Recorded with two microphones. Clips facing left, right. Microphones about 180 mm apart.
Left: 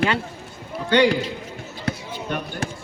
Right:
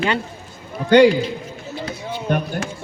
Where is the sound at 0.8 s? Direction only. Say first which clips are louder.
Right 6 dB; 45° right (ahead or behind).